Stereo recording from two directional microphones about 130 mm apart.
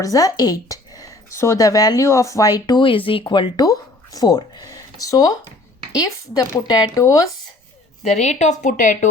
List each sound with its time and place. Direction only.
0.0 s speech: 30° left (ahead or behind)
3.7 s speech: 30° left (ahead or behind)
8.0 s a woman's voice: 60° left (ahead or behind); by 9.0 s 80° left